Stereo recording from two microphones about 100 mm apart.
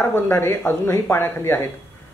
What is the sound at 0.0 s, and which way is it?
Speech, 20° left (ahead or behind).